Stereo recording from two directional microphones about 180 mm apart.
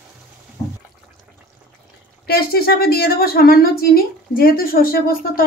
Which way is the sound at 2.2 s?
60° left (ahead or behind).